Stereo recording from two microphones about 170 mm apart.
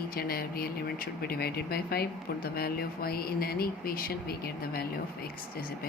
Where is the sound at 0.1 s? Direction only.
60° left (ahead or behind).